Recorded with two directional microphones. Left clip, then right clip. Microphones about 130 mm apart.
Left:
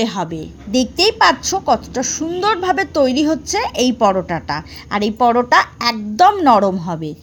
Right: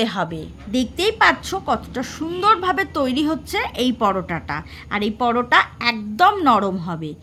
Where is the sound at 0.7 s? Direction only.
20° left (ahead or behind).